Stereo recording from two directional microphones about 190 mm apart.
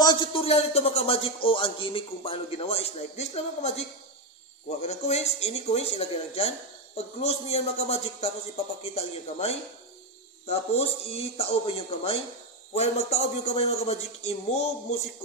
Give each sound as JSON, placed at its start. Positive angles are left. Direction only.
{"t": 0.0, "sound": "a man's voice", "side_deg": 25}